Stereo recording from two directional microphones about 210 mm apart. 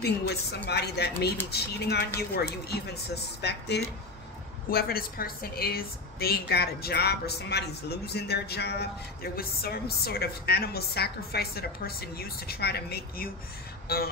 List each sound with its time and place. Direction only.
0.0 s a woman's voice: 50° left (ahead or behind)